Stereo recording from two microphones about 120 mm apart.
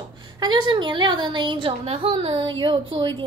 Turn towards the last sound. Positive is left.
turn(degrees=-40)  # may be behind; listen again after turning